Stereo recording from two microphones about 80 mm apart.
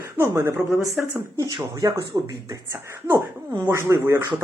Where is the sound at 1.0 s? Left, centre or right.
Centre.